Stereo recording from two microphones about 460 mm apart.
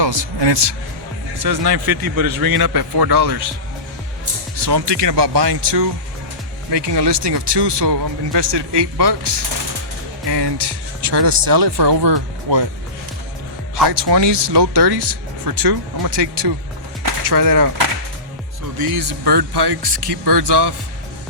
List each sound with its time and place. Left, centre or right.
0.0 s speech: right
1.4 s a man's voice: right
4.5 s speech: right
13.7 s speech: right
17.2 s a man's voice: right
18.8 s speech: right